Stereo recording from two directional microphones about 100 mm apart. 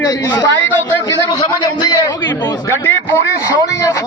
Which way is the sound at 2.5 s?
25° left (ahead or behind).